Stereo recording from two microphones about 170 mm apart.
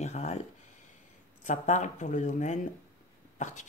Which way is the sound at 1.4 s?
45° left (ahead or behind).